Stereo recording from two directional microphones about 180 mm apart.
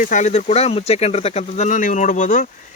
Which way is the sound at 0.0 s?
45° left (ahead or behind).